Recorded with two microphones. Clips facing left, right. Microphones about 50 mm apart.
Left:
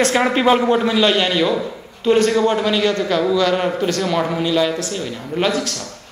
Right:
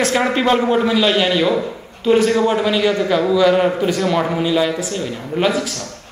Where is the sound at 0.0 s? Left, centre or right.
Centre.